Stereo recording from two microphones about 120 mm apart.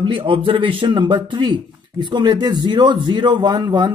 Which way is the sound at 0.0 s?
45° right (ahead or behind).